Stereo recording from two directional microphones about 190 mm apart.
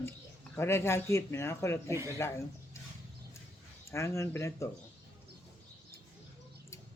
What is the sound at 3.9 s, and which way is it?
Speech, 15° left (ahead or behind).